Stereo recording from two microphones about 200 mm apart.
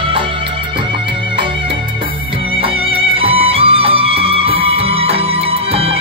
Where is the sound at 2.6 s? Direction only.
25° right (ahead or behind).